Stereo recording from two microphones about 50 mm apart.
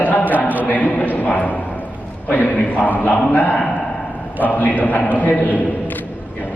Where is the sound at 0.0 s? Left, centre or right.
Left.